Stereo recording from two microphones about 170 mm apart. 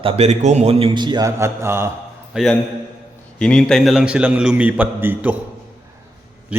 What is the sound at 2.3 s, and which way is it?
A man's voice, centre (ahead or behind).